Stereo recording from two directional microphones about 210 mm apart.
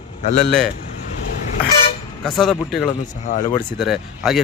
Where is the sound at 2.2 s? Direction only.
Centre (ahead or behind).